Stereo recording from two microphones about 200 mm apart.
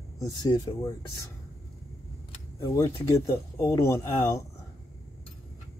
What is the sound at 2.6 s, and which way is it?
Speech, 15° left (ahead or behind).